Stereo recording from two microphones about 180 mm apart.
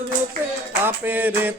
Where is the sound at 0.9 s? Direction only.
10° right (ahead or behind).